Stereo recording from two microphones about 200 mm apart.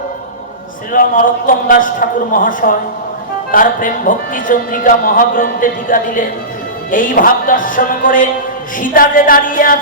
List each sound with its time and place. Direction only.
0.9 s speech: 40° left (ahead or behind)